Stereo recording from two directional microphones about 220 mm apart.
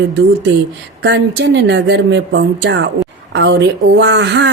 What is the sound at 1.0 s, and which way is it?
Speech, 50° right (ahead or behind).